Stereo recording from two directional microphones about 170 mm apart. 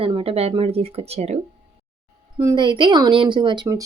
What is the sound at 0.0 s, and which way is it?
Speech, 35° right (ahead or behind).